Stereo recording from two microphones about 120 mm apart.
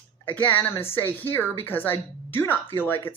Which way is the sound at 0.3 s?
15° left (ahead or behind).